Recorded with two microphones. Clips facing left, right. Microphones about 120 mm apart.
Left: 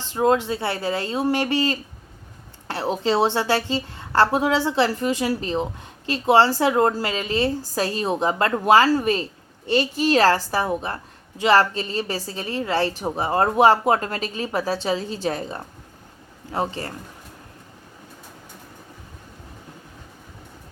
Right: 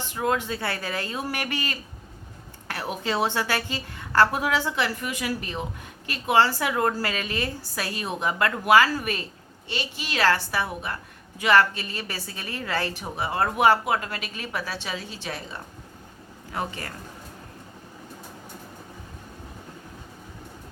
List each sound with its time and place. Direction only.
0.1 s a woman's voice: 25° left (ahead or behind)
9.6 s a woman's voice: 40° left (ahead or behind)
16.5 s a woman's voice: 30° left (ahead or behind)